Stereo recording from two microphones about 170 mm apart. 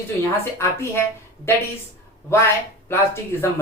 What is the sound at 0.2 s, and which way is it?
Speech, 15° left (ahead or behind).